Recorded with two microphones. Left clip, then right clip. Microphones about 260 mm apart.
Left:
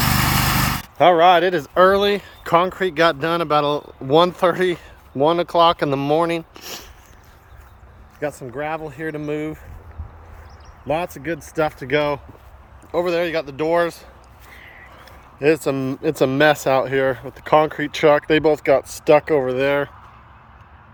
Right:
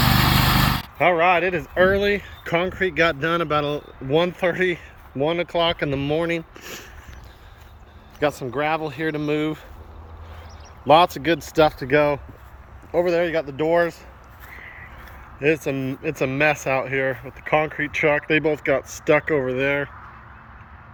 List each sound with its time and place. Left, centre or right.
0.0 s vehicle: centre
1.4 s speech: left
3.7 s speech: left
8.2 s speech: centre
10.8 s speech: centre
14.5 s a sound: centre
15.4 s speech: left